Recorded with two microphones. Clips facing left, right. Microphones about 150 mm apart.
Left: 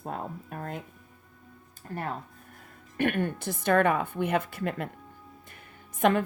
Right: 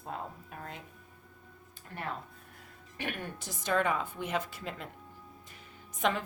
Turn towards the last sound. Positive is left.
turn(degrees=55)  # may be behind; listen again after turning